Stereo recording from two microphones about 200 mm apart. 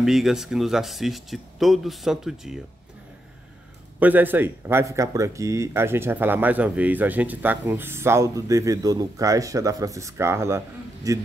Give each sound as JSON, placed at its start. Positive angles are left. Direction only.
{"t": 0.0, "sound": "speech", "side_deg": 0}
{"t": 4.0, "sound": "speech", "side_deg": -10}